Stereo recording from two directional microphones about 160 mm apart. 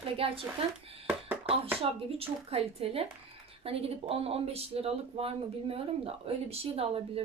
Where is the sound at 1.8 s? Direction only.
35° right (ahead or behind).